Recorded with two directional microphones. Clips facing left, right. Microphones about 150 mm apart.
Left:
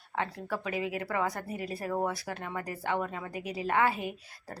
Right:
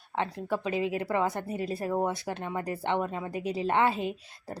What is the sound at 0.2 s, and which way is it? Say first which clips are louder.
A woman's voice: right 3 dB; 20° right (ahead or behind).